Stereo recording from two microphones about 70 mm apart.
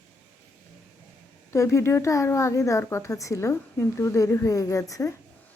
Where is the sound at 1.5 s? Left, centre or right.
Left.